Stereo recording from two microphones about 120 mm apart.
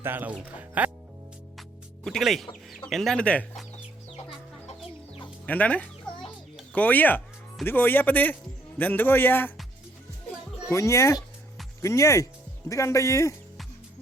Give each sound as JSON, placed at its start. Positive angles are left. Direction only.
{"t": 0.0, "sound": "speech", "side_deg": -15}
{"t": 2.0, "sound": "speech", "side_deg": 0}
{"t": 5.5, "sound": "speech", "side_deg": 10}
{"t": 10.7, "sound": "speech", "side_deg": 25}